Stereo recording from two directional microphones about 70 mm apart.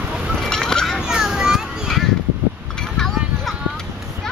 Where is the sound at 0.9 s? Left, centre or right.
Centre.